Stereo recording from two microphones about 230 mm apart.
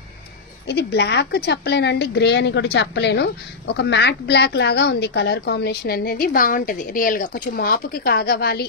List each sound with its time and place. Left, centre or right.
0.7 s speech: left